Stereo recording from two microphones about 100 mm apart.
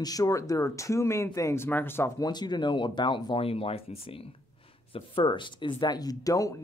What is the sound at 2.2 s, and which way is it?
Speech, 45° left (ahead or behind).